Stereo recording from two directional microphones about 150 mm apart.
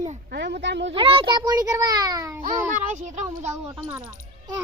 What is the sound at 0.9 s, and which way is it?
A child's voice, 40° right (ahead or behind).